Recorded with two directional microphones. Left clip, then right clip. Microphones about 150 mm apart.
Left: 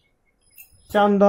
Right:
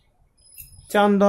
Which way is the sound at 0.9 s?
20° right (ahead or behind).